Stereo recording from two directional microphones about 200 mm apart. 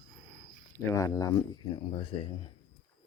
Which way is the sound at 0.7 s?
15° left (ahead or behind).